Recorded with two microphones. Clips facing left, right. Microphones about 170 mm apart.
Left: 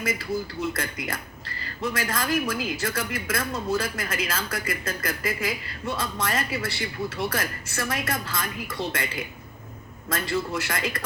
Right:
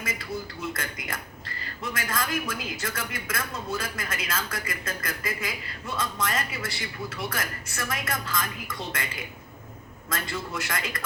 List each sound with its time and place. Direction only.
0.7 s speech: 35° left (ahead or behind)
10.1 s speech: 30° left (ahead or behind)